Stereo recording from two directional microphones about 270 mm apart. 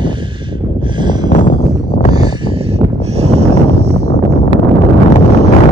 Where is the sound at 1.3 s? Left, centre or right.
Left.